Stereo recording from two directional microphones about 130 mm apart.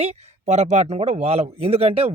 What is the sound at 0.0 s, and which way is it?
Speech, 60° right (ahead or behind).